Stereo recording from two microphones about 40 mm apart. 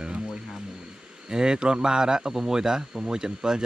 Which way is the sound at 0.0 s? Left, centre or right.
Right.